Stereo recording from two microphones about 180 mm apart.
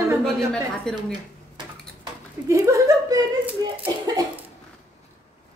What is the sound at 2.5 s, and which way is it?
Speech, 15° right (ahead or behind).